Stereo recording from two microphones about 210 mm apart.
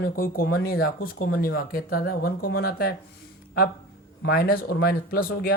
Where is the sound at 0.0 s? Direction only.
45° left (ahead or behind).